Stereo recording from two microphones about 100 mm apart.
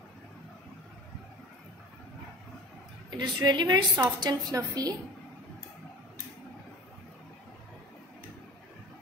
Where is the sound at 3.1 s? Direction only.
50° right (ahead or behind).